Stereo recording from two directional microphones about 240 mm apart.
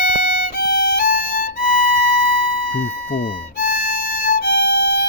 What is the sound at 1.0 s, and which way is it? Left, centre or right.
Violin, right.